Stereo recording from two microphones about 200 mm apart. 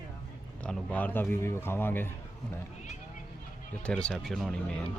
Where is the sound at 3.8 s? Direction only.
5° left (ahead or behind).